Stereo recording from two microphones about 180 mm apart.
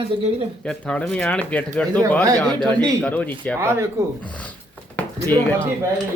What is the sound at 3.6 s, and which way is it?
Speech, 15° right (ahead or behind).